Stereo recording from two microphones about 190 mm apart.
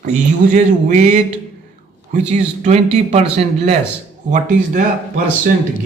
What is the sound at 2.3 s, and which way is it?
Speech, 35° right (ahead or behind).